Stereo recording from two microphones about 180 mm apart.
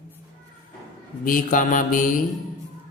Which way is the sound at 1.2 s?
50° left (ahead or behind).